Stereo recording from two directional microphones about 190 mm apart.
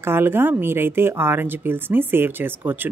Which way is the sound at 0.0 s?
10° right (ahead or behind).